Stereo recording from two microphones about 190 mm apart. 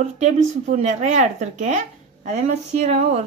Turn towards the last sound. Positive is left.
turn(degrees=-35)  # may be behind; listen again after turning